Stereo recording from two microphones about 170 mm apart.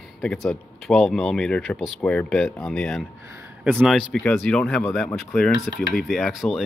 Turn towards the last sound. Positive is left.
turn(degrees=0)  # may be behind; listen again after turning